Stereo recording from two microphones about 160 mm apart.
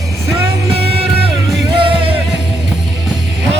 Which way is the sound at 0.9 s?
35° right (ahead or behind).